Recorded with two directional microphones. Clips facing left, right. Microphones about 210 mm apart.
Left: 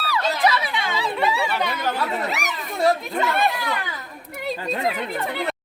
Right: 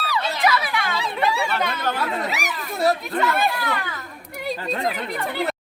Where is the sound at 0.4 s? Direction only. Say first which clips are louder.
Right 1 dB; 25° left (ahead or behind).